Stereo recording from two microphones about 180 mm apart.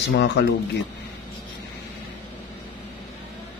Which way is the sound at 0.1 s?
75° left (ahead or behind).